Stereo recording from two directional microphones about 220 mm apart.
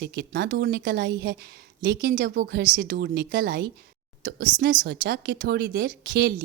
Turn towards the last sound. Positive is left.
turn(degrees=-50)  # may be behind; listen again after turning